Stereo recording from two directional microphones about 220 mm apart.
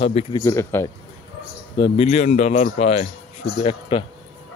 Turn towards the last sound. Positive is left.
turn(degrees=25)  # may be behind; listen again after turning